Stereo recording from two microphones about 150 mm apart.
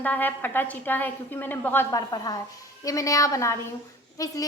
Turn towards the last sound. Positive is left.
turn(degrees=25)  # may be behind; listen again after turning